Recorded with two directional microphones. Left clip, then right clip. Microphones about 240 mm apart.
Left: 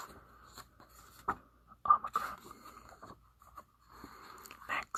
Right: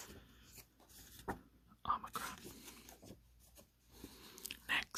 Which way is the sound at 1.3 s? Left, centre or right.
Right.